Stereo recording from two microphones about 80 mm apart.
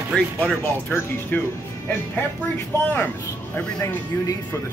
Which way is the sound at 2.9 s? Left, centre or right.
Left.